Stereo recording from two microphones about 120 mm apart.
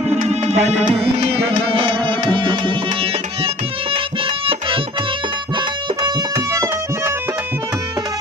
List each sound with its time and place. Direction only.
0.1 s music: 70° right (ahead or behind)
1.3 s music: 50° right (ahead or behind)
6.3 s music: 25° right (ahead or behind)